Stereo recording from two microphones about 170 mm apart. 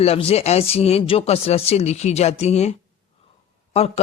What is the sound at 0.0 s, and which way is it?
Speech, 35° left (ahead or behind).